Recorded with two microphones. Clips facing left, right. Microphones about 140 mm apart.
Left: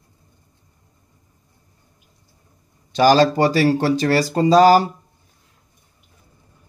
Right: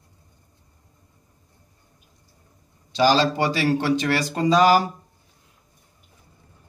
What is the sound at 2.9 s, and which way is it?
Speech, 50° left (ahead or behind).